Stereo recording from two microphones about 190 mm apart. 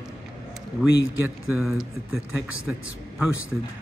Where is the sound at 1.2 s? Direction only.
5° right (ahead or behind).